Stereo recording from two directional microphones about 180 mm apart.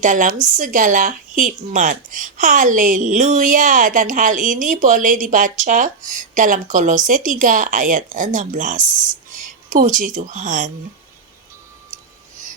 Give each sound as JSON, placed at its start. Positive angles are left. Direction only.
{"t": 0.0, "sound": "speech", "side_deg": -45}